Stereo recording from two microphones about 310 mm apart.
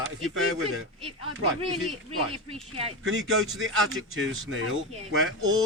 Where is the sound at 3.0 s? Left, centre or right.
Right.